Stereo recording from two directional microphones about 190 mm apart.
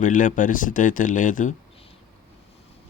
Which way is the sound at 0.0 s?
45° left (ahead or behind).